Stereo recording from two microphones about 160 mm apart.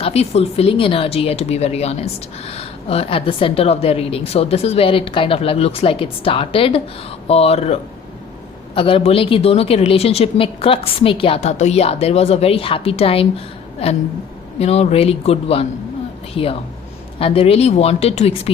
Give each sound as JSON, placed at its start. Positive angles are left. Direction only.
{"t": 0.0, "sound": "a woman's voice", "side_deg": 40}